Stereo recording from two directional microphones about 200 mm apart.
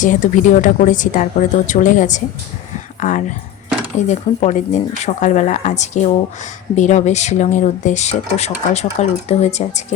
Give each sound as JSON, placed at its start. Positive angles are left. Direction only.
{"t": 0.0, "sound": "speech", "side_deg": 40}